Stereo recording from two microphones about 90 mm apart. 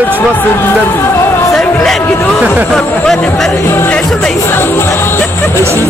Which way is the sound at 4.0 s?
5° left (ahead or behind).